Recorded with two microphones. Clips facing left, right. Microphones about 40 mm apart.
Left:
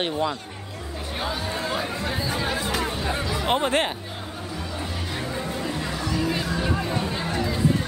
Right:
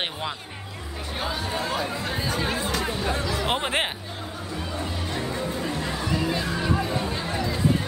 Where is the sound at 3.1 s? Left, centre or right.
Centre.